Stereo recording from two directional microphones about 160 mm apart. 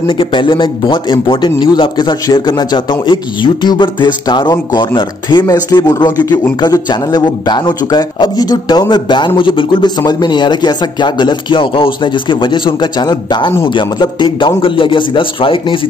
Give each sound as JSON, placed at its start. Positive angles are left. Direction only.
{"t": 0.1, "sound": "a man's voice", "side_deg": 30}